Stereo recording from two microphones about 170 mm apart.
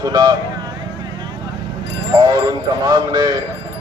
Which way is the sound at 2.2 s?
25° right (ahead or behind).